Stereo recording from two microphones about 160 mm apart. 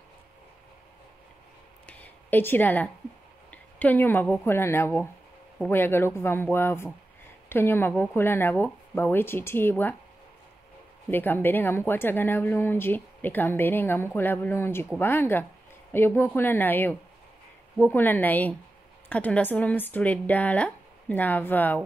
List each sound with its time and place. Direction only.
1.9 s a sound: 10° left (ahead or behind)
3.4 s a woman's voice: 10° left (ahead or behind)
11.1 s a woman's voice: 10° left (ahead or behind)